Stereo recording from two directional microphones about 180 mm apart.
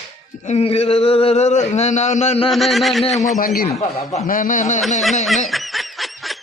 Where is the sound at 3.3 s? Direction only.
55° left (ahead or behind).